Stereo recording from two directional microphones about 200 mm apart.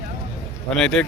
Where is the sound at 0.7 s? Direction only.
5° left (ahead or behind).